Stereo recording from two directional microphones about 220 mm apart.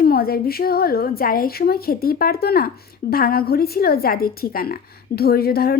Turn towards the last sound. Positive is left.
turn(degrees=45)  # may be behind; listen again after turning